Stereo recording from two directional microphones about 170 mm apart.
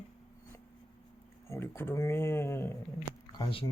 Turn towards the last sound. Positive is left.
turn(degrees=30)  # may be behind; listen again after turning